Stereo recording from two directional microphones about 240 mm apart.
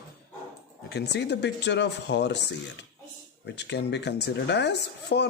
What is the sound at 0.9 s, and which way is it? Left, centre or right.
Speech, left.